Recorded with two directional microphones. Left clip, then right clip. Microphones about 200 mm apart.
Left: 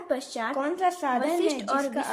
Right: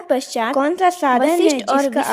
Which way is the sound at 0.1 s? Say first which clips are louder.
Right 11 dB; 35° right (ahead or behind).